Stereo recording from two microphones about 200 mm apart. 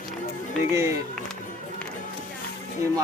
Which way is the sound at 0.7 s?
15° right (ahead or behind).